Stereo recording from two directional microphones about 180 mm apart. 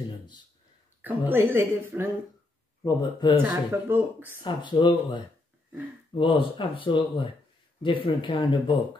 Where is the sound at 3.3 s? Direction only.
10° right (ahead or behind).